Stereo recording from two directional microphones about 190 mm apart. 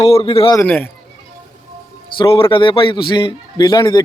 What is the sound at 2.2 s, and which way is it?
A man's voice, 30° left (ahead or behind).